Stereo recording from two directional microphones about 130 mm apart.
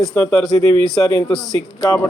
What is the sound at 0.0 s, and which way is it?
Speech, 10° left (ahead or behind).